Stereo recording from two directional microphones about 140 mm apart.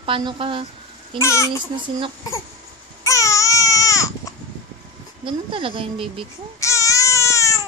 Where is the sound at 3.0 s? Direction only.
20° left (ahead or behind).